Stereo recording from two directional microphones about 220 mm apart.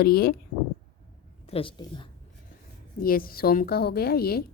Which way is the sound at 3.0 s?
40° left (ahead or behind).